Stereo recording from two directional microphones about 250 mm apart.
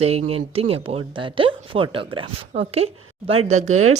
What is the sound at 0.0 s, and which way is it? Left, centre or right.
Speech, right.